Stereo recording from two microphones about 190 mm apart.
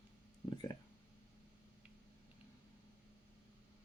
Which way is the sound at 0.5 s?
20° left (ahead or behind).